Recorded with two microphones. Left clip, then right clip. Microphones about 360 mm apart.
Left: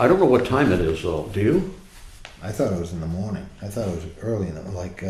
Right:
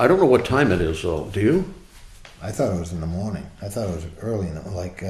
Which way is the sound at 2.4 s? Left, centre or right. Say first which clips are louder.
Even; right.